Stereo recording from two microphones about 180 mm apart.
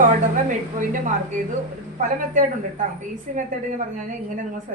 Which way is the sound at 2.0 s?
45° right (ahead or behind).